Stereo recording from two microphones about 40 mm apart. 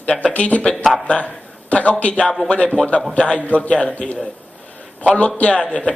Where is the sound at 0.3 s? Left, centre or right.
Left.